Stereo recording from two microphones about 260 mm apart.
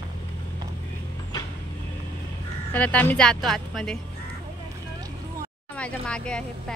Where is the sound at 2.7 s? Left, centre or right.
Centre.